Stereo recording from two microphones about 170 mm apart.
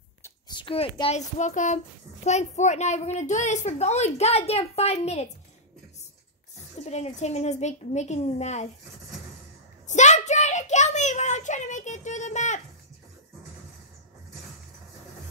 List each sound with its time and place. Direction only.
0.5 s a woman's voice: 30° left (ahead or behind)
6.8 s a woman's voice: 40° left (ahead or behind)
9.8 s a sound: 45° left (ahead or behind)